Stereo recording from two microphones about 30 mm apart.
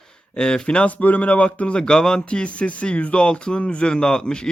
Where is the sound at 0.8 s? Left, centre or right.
Left.